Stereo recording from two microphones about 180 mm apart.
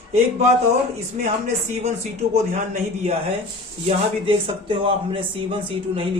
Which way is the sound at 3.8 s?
30° right (ahead or behind).